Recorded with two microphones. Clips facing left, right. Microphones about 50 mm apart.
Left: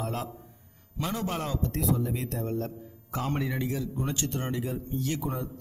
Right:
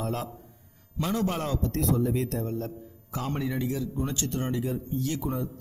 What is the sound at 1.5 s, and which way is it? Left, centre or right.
A man's voice, left.